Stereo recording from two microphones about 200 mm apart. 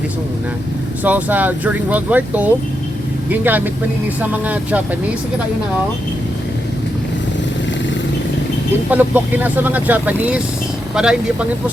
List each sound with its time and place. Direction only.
1.0 s speech: 10° right (ahead or behind)
8.9 s speech: 10° right (ahead or behind)